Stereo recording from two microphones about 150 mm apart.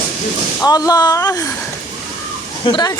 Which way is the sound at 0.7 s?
25° left (ahead or behind).